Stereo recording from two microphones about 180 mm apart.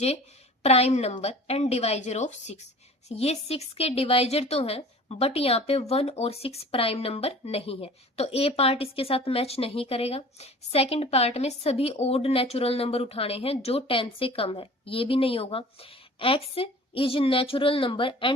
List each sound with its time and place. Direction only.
0.6 s a woman's voice: 35° left (ahead or behind)